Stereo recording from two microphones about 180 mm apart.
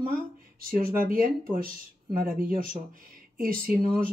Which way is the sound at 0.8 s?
55° right (ahead or behind).